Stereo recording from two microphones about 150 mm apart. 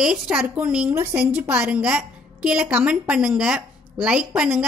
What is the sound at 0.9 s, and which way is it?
A woman's voice, 15° right (ahead or behind).